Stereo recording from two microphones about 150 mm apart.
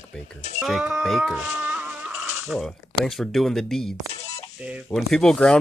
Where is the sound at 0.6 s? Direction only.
5° right (ahead or behind).